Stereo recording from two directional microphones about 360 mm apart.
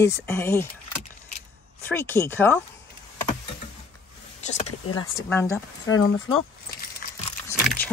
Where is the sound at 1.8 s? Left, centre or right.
Centre.